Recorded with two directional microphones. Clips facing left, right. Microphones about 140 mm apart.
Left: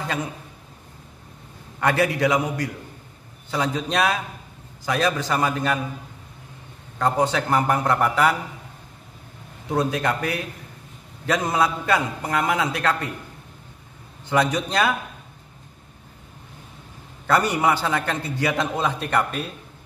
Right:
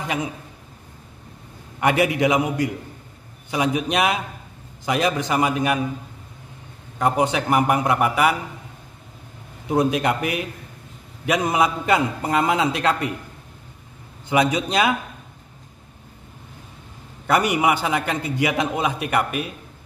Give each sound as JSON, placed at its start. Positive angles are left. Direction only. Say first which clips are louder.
{"t": 0.0, "sound": "a man's voice", "louder": "right 2 dB", "side_deg": -15}
{"t": 1.8, "sound": "a man's voice", "louder": "right 2 dB", "side_deg": -15}
{"t": 7.0, "sound": "a man's voice", "louder": "right 1 dB", "side_deg": -15}
{"t": 9.7, "sound": "a man's voice", "louder": "right 3 dB", "side_deg": -20}
{"t": 14.3, "sound": "a man's voice", "louder": "right 2 dB", "side_deg": -15}
{"t": 17.3, "sound": "a man's voice", "louder": "right 1 dB", "side_deg": -15}